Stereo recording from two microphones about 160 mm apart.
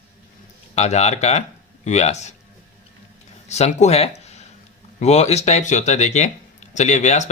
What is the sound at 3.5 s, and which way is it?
Speech, 45° left (ahead or behind).